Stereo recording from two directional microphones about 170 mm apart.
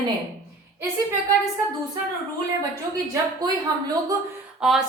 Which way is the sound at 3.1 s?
25° right (ahead or behind).